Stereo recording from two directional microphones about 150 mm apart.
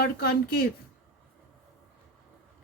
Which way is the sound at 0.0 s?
85° left.